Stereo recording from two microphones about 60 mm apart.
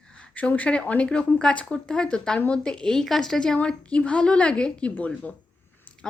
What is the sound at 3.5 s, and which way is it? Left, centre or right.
A woman's voice, centre.